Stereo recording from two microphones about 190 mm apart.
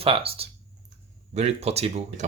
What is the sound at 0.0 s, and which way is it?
Speech, 30° right (ahead or behind).